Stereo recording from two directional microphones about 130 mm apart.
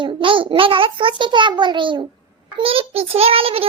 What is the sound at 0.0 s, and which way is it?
A child's voice, 40° right (ahead or behind).